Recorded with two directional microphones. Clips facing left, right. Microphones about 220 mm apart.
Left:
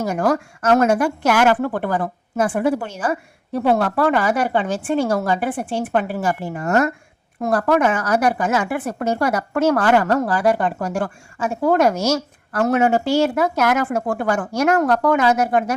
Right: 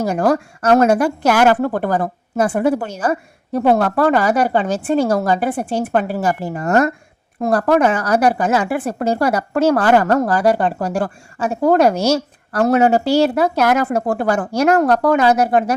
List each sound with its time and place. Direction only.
0.0 s speech: 35° right (ahead or behind)